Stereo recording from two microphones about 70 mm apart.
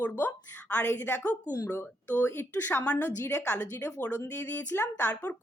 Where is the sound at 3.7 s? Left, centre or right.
Left.